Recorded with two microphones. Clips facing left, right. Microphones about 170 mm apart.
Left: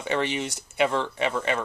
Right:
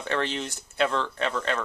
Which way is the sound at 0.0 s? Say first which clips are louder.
Left 2 dB; 15° left (ahead or behind).